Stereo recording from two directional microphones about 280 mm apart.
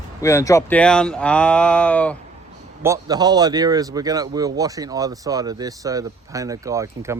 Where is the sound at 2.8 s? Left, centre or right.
Centre.